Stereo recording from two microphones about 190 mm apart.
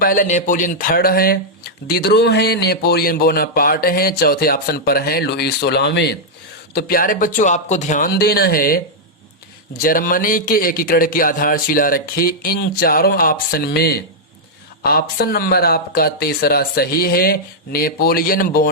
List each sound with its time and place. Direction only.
0.0 s a man's voice: 45° left (ahead or behind); by 6.1 s 65° left (ahead or behind)
6.7 s a man's voice: 55° left (ahead or behind)